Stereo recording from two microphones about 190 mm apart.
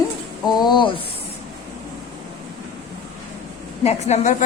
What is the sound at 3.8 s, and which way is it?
Speech, 35° left (ahead or behind).